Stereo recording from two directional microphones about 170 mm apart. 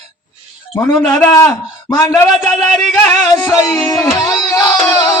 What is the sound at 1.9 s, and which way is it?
Music, 20° left (ahead or behind).